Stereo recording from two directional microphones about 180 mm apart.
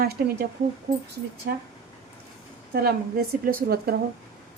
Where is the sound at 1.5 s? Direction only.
60° right (ahead or behind).